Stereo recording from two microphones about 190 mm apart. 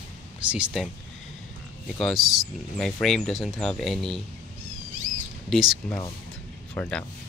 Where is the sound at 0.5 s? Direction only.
5° right (ahead or behind).